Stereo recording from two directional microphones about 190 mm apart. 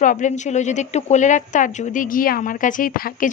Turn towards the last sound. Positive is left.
turn(degrees=50)  # may be behind; listen again after turning